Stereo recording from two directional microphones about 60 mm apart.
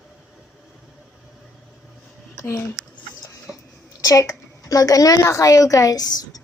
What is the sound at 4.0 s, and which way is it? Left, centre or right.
A woman's voice, left.